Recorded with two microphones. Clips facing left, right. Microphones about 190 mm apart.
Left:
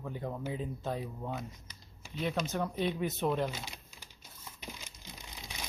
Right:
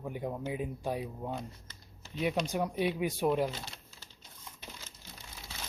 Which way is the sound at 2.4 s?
10° right (ahead or behind).